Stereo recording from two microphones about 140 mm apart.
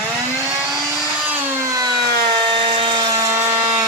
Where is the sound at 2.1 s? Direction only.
90° right.